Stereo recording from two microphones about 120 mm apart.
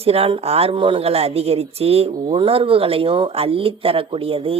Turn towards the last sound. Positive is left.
turn(degrees=-50)  # may be behind; listen again after turning